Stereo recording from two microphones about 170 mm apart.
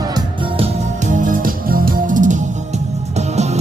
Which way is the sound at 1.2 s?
55° right (ahead or behind).